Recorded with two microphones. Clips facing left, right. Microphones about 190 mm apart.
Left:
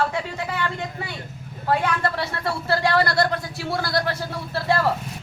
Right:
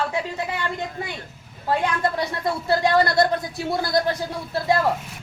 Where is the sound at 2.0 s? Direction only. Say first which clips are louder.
Right 2 dB; 15° right (ahead or behind).